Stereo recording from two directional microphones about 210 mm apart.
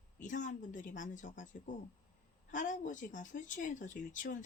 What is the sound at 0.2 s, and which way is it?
Speech, 35° left (ahead or behind).